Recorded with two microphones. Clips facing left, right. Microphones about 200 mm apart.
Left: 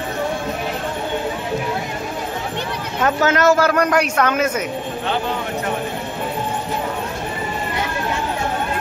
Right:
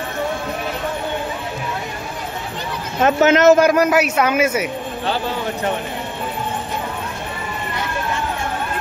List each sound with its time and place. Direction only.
3.0 s a man's voice: 20° right (ahead or behind)
3.7 s speech: 5° right (ahead or behind)